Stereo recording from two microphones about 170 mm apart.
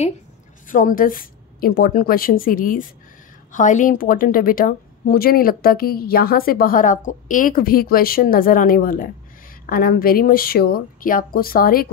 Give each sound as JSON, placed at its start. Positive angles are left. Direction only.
{"t": 0.7, "sound": "a woman's voice", "side_deg": 50}